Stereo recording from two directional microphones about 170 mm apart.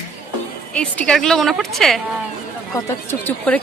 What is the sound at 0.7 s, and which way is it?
A woman's voice, 5° left (ahead or behind).